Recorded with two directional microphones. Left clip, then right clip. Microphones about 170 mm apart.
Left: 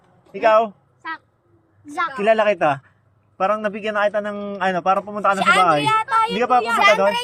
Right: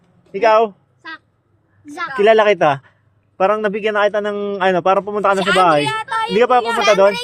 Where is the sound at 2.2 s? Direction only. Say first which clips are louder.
Right 6 dB; 45° right (ahead or behind).